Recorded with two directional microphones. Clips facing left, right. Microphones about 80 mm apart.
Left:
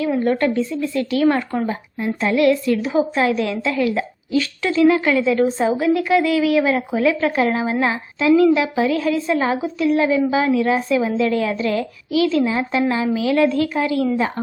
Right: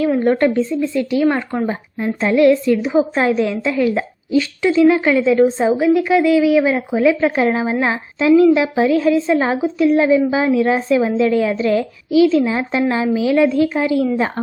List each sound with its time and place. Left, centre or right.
0.2 s a woman's voice: right
0.5 s a woman's voice: right
3.2 s a woman's voice: right